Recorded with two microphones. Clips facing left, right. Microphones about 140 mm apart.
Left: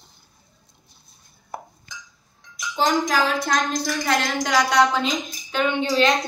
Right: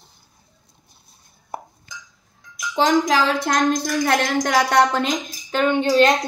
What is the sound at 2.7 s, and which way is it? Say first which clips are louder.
Speech: right 4 dB; 90° right.